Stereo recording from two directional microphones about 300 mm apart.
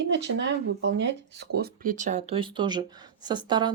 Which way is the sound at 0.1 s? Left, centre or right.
Right.